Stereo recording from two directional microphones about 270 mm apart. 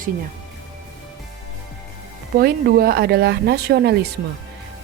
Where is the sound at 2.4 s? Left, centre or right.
Right.